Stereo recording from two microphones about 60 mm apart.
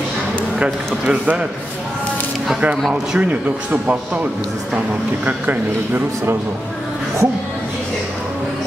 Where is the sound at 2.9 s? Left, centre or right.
Centre.